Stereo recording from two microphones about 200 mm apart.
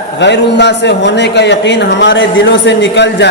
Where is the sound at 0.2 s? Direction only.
60° left (ahead or behind).